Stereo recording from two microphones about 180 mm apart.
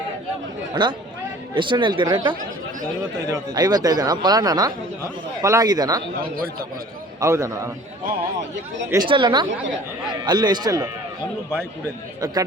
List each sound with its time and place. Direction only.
0.7 s speech: 25° right (ahead or behind)
7.2 s a man's voice: 15° right (ahead or behind)
8.9 s speech: 25° right (ahead or behind)
12.2 s speech: 20° right (ahead or behind)